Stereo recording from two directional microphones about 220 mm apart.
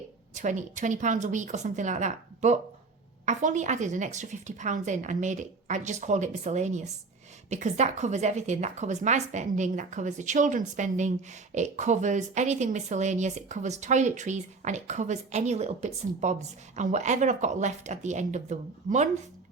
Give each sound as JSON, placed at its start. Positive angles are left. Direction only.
{"t": 0.3, "sound": "speech", "side_deg": -35}